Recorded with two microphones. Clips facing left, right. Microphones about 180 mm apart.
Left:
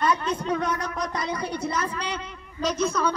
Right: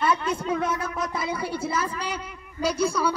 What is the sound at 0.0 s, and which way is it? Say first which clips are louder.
A woman's voice: even; 10° right (ahead or behind).